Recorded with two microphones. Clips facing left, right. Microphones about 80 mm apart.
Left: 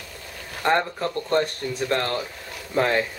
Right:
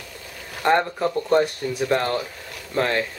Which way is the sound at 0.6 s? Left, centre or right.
Centre.